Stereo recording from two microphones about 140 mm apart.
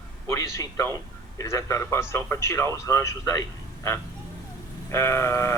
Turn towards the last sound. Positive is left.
turn(degrees=20)  # may be behind; listen again after turning